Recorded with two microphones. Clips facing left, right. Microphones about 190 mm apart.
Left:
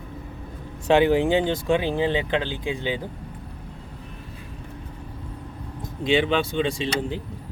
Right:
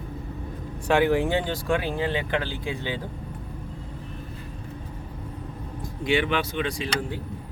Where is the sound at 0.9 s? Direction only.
20° left (ahead or behind).